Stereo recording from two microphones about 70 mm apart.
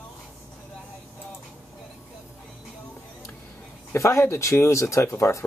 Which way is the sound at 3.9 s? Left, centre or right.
Left.